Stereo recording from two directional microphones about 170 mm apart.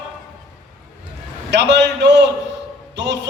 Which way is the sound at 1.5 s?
90° right.